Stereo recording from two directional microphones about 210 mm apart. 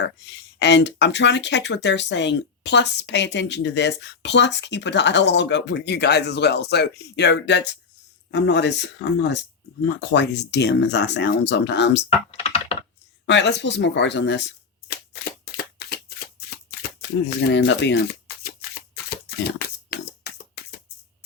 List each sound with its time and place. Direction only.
0.6 s speech: 55° left (ahead or behind)
12.3 s computer keyboard: 30° left (ahead or behind)
13.2 s speech: 55° left (ahead or behind)
14.8 s a sound: 50° left (ahead or behind)
17.0 s speech: 50° left (ahead or behind)
18.7 s a sound: 45° left (ahead or behind)